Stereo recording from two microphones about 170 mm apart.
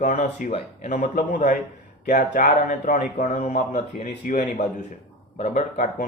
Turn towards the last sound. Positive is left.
turn(degrees=50)  # may be behind; listen again after turning